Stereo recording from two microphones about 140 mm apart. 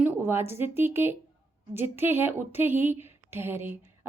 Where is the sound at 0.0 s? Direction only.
15° right (ahead or behind).